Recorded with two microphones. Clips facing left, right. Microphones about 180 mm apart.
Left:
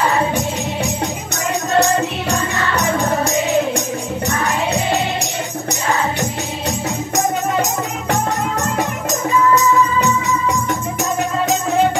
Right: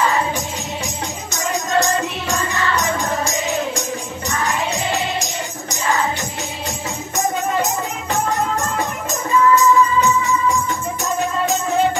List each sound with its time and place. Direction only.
1.8 s music: 65° left (ahead or behind)